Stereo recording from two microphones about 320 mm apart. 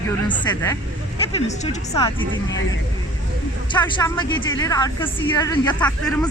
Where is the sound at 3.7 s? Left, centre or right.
Centre.